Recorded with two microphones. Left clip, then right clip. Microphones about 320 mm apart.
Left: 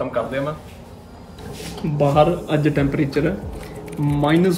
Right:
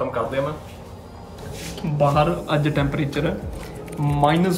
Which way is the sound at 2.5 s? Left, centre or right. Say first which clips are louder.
Left 3 dB; centre.